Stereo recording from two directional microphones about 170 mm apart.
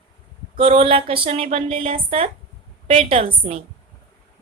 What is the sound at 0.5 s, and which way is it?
A woman's voice, 35° right (ahead or behind).